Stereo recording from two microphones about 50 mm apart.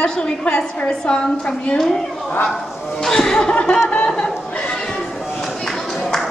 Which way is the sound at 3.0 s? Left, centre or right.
Centre.